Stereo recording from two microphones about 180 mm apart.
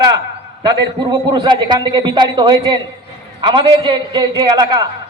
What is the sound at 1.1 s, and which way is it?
A man's voice, 25° right (ahead or behind).